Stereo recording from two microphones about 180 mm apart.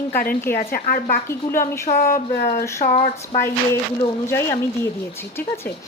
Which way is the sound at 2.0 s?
50° left (ahead or behind).